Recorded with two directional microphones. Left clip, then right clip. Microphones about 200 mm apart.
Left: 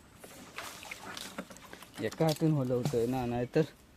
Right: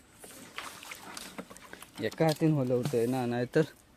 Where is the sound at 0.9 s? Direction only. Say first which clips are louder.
Left 1 dB; 55° right (ahead or behind).